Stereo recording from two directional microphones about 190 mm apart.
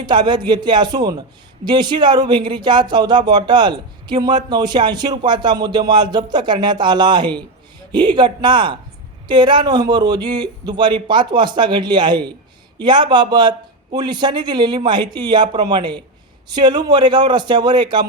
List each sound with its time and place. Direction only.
0.0 s speech: 25° right (ahead or behind)